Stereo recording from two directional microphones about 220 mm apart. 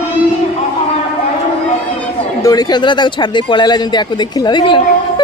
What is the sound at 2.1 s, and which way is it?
A woman's voice, 15° left (ahead or behind).